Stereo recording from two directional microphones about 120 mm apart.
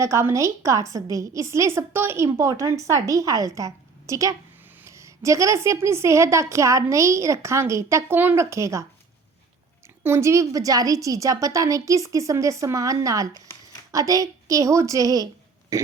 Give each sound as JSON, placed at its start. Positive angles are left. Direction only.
{"t": 0.0, "sound": "a woman's voice", "side_deg": -25}
{"t": 10.0, "sound": "a woman's voice", "side_deg": -20}
{"t": 15.7, "sound": "burping", "side_deg": -30}